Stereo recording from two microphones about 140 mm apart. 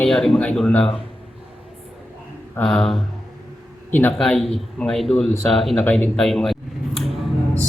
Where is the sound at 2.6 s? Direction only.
5° left (ahead or behind).